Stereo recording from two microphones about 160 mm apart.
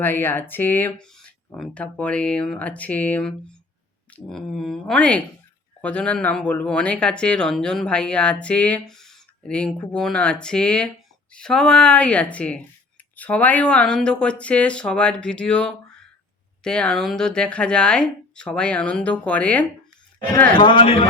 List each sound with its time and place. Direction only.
0.0 s speech: 15° left (ahead or behind)
20.6 s a man's voice: 30° left (ahead or behind)